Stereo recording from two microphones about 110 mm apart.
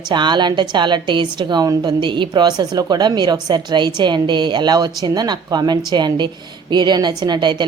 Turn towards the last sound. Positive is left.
turn(degrees=-45)  # may be behind; listen again after turning